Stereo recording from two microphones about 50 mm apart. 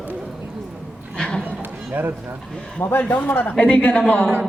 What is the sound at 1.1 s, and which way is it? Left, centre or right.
Horse, centre.